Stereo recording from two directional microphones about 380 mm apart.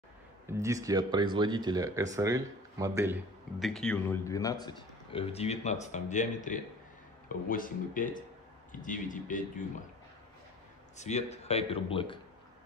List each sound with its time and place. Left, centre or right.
0.5 s speech: centre; by 9.4 s left
11.0 s speech: centre